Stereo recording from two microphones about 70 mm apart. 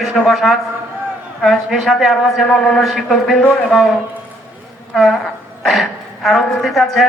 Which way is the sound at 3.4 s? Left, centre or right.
Left.